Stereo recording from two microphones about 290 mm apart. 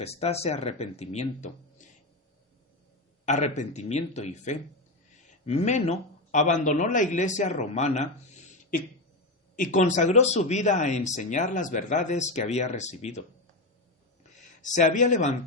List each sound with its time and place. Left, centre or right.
0.0 s speech: left
3.2 s speech: left
9.6 s speech: left
14.6 s speech: left